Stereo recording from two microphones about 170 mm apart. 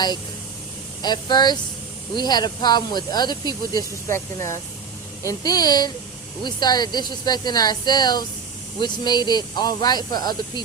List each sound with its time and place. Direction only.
1.0 s speech: 25° left (ahead or behind)